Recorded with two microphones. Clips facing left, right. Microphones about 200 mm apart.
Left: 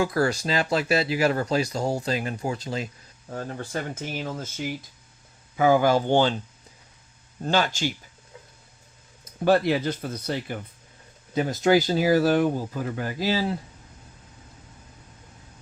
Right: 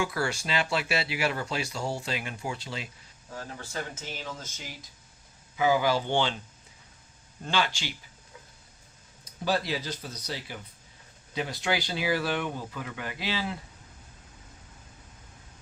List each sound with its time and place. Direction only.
0.0 s speech: 40° left (ahead or behind)
3.3 s speech: 55° left (ahead or behind)
5.5 s speech: 50° left (ahead or behind)
7.4 s speech: 45° left (ahead or behind)
9.2 s speech: 55° left (ahead or behind); by 13.6 s 40° left (ahead or behind)